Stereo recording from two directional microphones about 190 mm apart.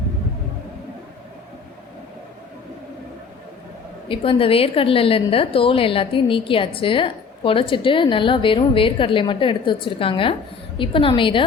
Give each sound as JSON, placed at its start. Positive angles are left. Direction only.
{"t": 4.1, "sound": "a woman's voice", "side_deg": 30}